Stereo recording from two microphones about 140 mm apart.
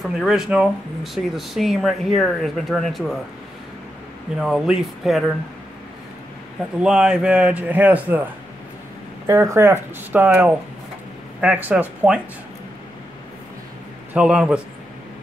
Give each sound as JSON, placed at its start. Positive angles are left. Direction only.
{"t": 0.0, "sound": "speech", "side_deg": 0}
{"t": 4.4, "sound": "speech", "side_deg": -5}
{"t": 6.8, "sound": "a man's voice", "side_deg": -5}
{"t": 9.3, "sound": "a man's voice", "side_deg": -20}
{"t": 14.1, "sound": "a man's voice", "side_deg": -5}